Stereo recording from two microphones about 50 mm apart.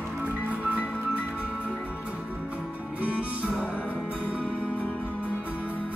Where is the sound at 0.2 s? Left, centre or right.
Right.